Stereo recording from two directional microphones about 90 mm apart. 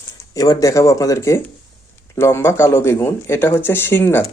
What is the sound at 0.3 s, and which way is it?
Speech, 40° left (ahead or behind).